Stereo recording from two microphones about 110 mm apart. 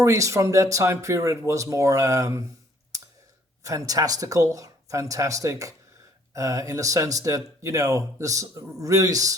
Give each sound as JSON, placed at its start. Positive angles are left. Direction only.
{"t": 0.0, "sound": "speech", "side_deg": -30}
{"t": 3.6, "sound": "speech", "side_deg": -30}